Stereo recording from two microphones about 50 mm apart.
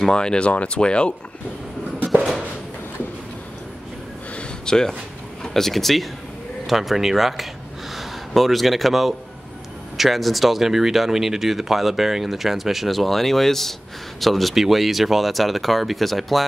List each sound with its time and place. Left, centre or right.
0.0 s speech: centre
4.4 s a sound: centre
5.4 s speech: centre